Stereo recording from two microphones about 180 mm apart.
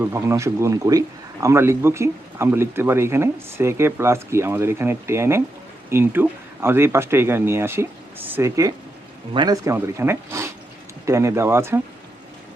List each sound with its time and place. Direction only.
0.0 s speech: 15° right (ahead or behind)